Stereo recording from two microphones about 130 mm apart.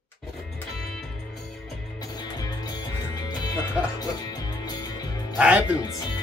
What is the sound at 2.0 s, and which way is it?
Music, 30° left (ahead or behind).